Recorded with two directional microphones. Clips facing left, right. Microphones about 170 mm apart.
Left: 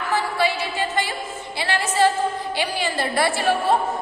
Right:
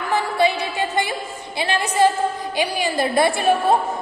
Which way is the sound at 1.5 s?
20° right (ahead or behind).